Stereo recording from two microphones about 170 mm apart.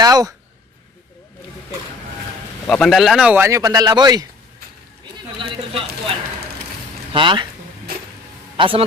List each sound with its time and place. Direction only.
0.0 s speech: 20° right (ahead or behind)
2.6 s speech: 5° left (ahead or behind); by 4.3 s 25° right (ahead or behind)
5.4 s speech: 30° right (ahead or behind)
7.1 s speech: 30° right (ahead or behind)
7.9 s music: 70° right (ahead or behind)
8.5 s speech: 30° right (ahead or behind)